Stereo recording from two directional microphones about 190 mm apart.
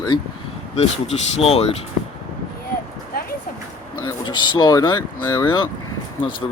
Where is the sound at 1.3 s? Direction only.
30° left (ahead or behind).